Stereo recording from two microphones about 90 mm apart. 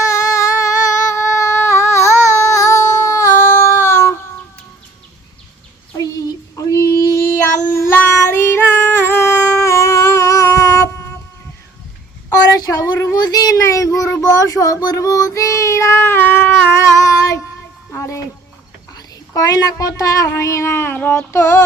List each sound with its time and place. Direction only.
0.0 s a sound: 35° left (ahead or behind)
6.0 s child singing: 40° left (ahead or behind)
7.7 s child singing: 30° left (ahead or behind)
12.3 s child singing: 45° left (ahead or behind); by 16.7 s 25° left (ahead or behind)
16.7 s a sound: 35° left (ahead or behind)
17.9 s music: 35° left (ahead or behind)
18.9 s a sound: 40° left (ahead or behind)
20.3 s child singing: 30° left (ahead or behind)
21.3 s female singing: 30° left (ahead or behind)